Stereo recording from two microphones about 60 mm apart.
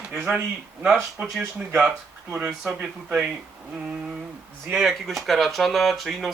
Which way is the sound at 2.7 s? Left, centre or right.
Right.